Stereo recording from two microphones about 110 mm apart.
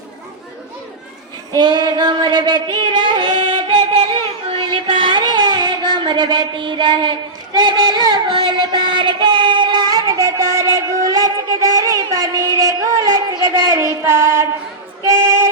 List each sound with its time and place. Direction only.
1.5 s female singing: 40° right (ahead or behind)
13.5 s child singing: 25° right (ahead or behind)
15.0 s singing: 30° right (ahead or behind)